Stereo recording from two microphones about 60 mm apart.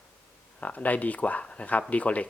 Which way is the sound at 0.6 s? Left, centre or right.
Left.